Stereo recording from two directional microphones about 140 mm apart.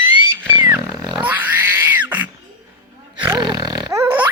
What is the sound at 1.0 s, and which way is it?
Grunt, 10° right (ahead or behind).